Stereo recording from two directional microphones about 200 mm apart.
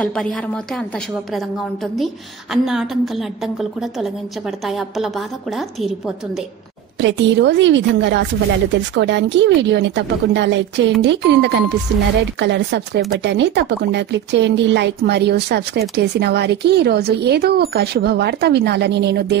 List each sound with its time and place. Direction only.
0.0 s a woman's voice: 5° left (ahead or behind)
7.0 s speech: 65° right (ahead or behind)